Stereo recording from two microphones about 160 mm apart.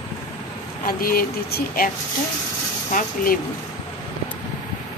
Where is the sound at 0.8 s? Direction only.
65° left (ahead or behind).